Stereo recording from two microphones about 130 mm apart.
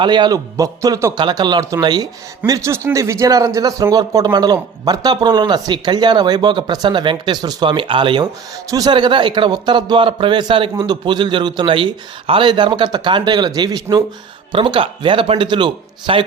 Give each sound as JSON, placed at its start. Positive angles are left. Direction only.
{"t": 0.0, "sound": "a man's voice", "side_deg": -35}
{"t": 2.5, "sound": "speech", "side_deg": -20}